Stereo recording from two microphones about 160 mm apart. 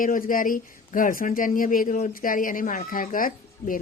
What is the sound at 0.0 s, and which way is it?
Speech, 60° left (ahead or behind).